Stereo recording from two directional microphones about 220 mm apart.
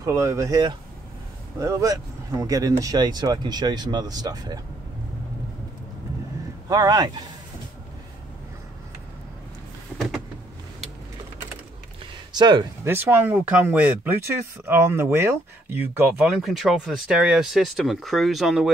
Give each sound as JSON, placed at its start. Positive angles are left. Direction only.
{"t": 0.0, "sound": "speech", "side_deg": -15}
{"t": 6.7, "sound": "speech", "side_deg": -15}
{"t": 12.4, "sound": "speech", "side_deg": -20}